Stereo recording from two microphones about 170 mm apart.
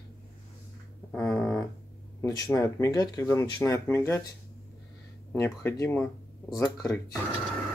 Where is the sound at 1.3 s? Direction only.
5° left (ahead or behind).